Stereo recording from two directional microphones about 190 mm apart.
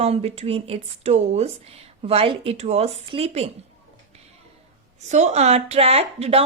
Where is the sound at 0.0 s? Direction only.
35° right (ahead or behind).